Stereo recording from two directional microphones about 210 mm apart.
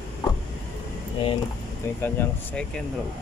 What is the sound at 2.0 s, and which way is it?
Speech, 10° left (ahead or behind).